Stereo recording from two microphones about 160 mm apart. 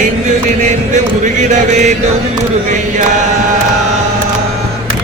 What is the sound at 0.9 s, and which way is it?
Chant, 50° right (ahead or behind).